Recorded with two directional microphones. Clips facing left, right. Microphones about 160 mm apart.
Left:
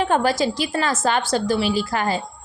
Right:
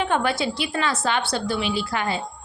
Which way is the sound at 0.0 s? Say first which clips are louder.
Left 3 dB; 40° left (ahead or behind).